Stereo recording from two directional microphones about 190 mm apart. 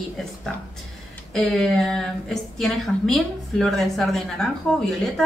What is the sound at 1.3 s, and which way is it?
A woman's voice, 5° left (ahead or behind).